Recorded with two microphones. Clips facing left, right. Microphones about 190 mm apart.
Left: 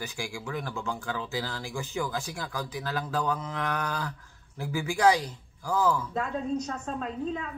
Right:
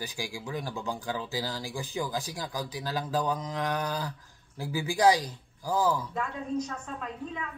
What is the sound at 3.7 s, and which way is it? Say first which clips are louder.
Speech: even; 35° right (ahead or behind).